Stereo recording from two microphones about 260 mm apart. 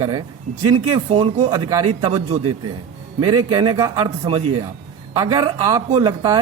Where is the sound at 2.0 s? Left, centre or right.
Right.